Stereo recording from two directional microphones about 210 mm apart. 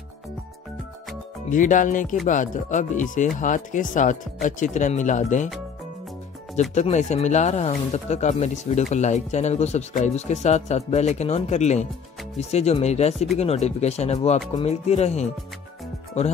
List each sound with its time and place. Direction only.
1.5 s speech: 40° left (ahead or behind)
6.7 s speech: 35° left (ahead or behind)